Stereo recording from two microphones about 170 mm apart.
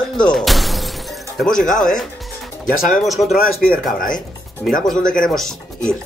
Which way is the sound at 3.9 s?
50° left (ahead or behind).